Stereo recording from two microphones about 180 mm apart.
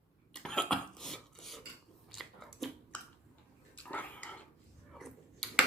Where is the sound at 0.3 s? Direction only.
5° left (ahead or behind).